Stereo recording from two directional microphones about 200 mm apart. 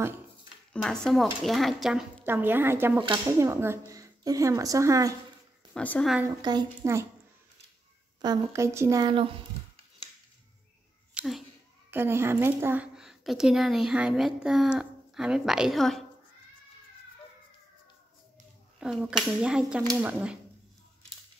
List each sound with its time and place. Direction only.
0.7 s speech: centre (ahead or behind); by 5.1 s 15° right (ahead or behind)
5.8 s speech: 5° left (ahead or behind)
6.2 s speech: 20° right (ahead or behind)
8.2 s speech: 15° right (ahead or behind)
11.1 s a sound: centre (ahead or behind)
11.9 s speech: 10° right (ahead or behind)
18.8 s speech: 5° right (ahead or behind)